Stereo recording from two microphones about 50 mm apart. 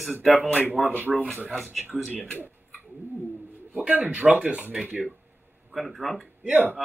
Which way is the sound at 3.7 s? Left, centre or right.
Right.